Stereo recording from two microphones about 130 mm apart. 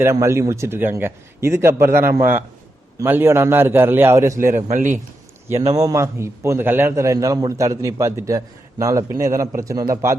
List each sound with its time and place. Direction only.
0.0 s a man's voice: 20° right (ahead or behind)
4.7 s a man's voice: 70° right (ahead or behind)
5.5 s a man's voice: 25° right (ahead or behind)